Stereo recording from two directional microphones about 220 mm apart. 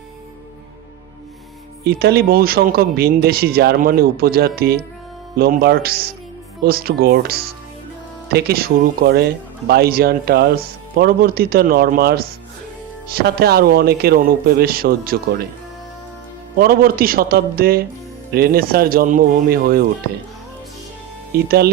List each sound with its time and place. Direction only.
1.8 s speech: 50° right (ahead or behind)
16.6 s speech: 40° right (ahead or behind)
21.3 s speech: 45° right (ahead or behind)